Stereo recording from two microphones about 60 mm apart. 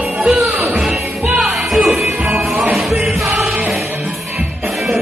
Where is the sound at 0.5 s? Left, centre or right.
Right.